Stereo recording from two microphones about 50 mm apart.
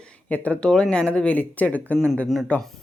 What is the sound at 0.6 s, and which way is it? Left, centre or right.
Speech, centre.